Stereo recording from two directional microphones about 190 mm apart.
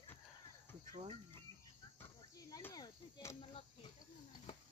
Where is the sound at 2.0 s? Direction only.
10° left (ahead or behind).